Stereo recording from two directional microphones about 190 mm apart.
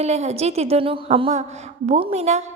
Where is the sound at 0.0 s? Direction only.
35° right (ahead or behind).